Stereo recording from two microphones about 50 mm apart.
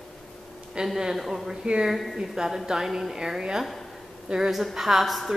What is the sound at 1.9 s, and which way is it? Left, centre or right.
A woman's voice, centre.